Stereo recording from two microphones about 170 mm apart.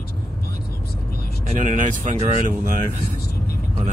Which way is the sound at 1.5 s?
45° right (ahead or behind).